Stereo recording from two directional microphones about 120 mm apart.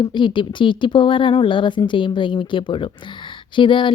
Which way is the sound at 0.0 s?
40° left (ahead or behind).